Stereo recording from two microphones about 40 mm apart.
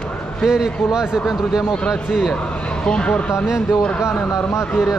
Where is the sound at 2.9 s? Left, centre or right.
Left.